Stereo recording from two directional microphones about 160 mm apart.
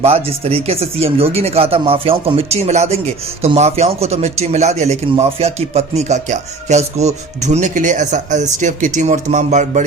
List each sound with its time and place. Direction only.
0.0 s a man's voice: 40° right (ahead or behind)